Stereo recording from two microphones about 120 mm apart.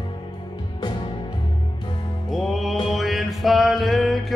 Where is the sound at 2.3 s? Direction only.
Centre (ahead or behind).